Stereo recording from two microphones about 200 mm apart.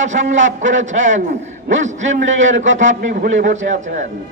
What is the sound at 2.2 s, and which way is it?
A man's voice, 70° right (ahead or behind).